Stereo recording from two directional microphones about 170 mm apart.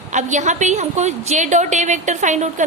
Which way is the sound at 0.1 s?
45° right (ahead or behind).